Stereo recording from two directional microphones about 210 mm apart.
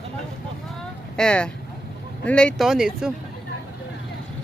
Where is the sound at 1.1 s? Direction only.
5° left (ahead or behind).